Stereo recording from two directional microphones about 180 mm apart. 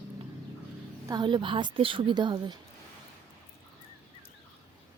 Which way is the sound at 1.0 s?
25° right (ahead or behind).